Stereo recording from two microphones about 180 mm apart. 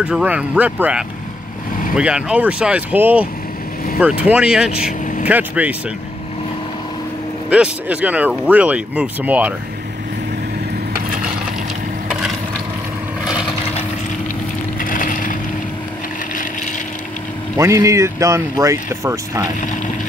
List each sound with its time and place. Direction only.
0.0 s speech: 5° right (ahead or behind)
7.4 s speech: 5° right (ahead or behind)
14.8 s a sound: 50° left (ahead or behind)
17.6 s speech: 15° right (ahead or behind)